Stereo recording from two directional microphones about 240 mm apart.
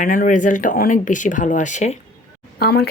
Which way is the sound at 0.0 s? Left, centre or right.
Left.